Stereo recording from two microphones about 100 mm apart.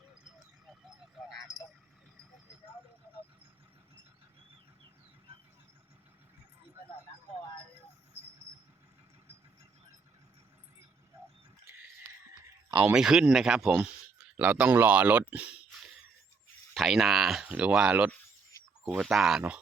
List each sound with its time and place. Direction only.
0.7 s vehicle: centre (ahead or behind)
1.4 s keys jangling: 40° left (ahead or behind)
12.8 s speech: 5° right (ahead or behind)
16.7 s speech: centre (ahead or behind)